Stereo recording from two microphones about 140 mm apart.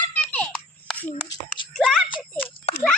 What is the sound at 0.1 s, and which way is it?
Babbling, 10° left (ahead or behind).